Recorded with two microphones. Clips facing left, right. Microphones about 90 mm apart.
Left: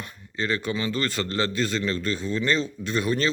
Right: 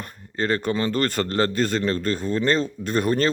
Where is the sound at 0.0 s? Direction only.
45° right (ahead or behind).